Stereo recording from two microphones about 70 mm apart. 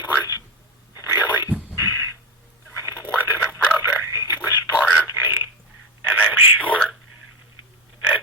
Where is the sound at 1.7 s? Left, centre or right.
Right.